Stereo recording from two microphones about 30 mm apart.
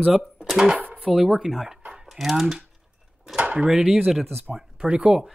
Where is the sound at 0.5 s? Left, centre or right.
Centre.